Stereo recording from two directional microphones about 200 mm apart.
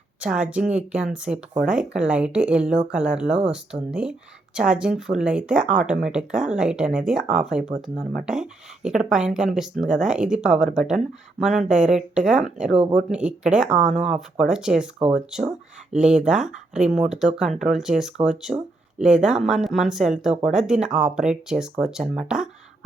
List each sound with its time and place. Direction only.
0.2 s speech: 5° right (ahead or behind)